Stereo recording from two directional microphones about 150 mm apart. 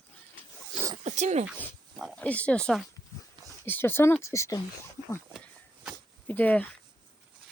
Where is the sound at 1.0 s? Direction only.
50° right (ahead or behind).